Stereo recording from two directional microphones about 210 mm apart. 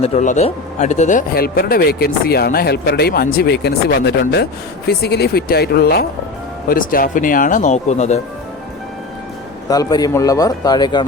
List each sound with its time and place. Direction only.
0.0 s speech: 35° left (ahead or behind)
9.6 s speech: 15° left (ahead or behind)